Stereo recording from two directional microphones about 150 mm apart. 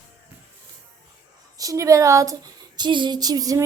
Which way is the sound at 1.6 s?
20° right (ahead or behind).